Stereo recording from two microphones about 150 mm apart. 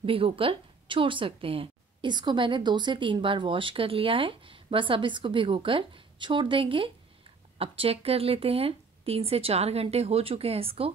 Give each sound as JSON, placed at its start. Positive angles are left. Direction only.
{"t": 0.0, "sound": "a woman's voice", "side_deg": -35}